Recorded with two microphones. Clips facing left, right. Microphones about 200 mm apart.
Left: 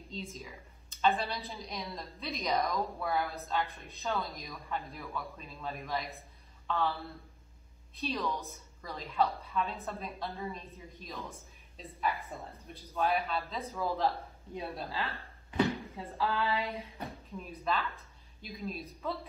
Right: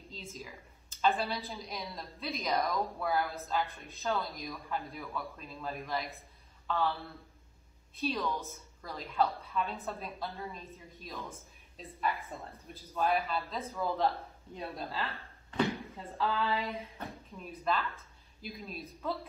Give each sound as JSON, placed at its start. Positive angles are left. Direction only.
{"t": 0.1, "sound": "a woman's voice", "side_deg": 0}